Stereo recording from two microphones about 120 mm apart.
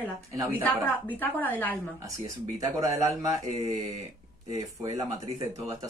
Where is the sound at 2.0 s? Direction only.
30° right (ahead or behind).